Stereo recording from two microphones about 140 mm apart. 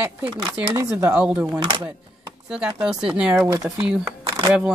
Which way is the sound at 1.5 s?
30° right (ahead or behind).